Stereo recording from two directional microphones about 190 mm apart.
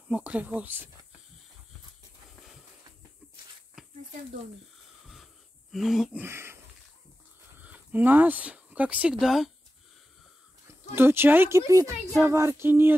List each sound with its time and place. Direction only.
0.1 s speech: 5° right (ahead or behind)
5.0 s wheeze: centre (ahead or behind)
6.2 s speech: 15° right (ahead or behind)
10.7 s speech: 10° right (ahead or behind)